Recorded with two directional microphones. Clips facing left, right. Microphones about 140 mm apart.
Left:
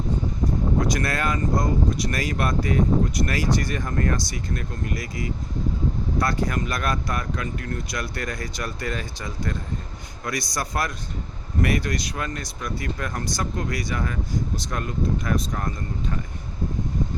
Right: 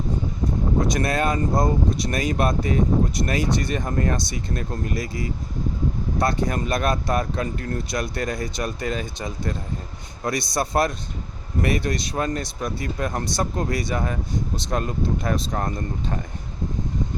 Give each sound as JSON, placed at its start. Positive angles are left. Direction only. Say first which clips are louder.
{"t": 0.8, "sound": "speech", "louder": "right 5 dB", "side_deg": -25}